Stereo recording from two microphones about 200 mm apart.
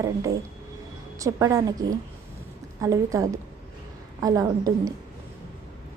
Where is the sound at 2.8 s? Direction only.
15° right (ahead or behind).